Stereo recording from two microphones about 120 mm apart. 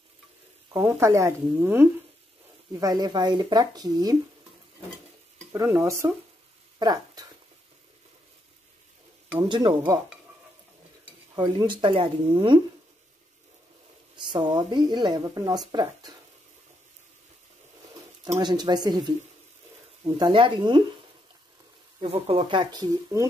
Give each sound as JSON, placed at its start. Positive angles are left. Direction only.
{"t": 0.7, "sound": "a woman's voice", "side_deg": -20}
{"t": 2.7, "sound": "speech", "side_deg": -30}
{"t": 5.8, "sound": "a woman's voice", "side_deg": -20}
{"t": 6.8, "sound": "speech", "side_deg": -35}
{"t": 9.4, "sound": "speech", "side_deg": -40}
{"t": 11.3, "sound": "speech", "side_deg": -40}
{"t": 14.1, "sound": "speech", "side_deg": -40}
{"t": 18.2, "sound": "speech", "side_deg": -35}
{"t": 20.2, "sound": "speech", "side_deg": -40}
{"t": 22.0, "sound": "speech", "side_deg": -55}
{"t": 22.4, "sound": "speech", "side_deg": -40}